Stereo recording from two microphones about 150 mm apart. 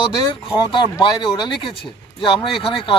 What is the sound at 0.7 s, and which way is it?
Speech, 30° left (ahead or behind).